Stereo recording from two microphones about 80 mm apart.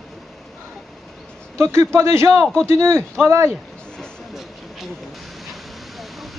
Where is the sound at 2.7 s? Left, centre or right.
Centre.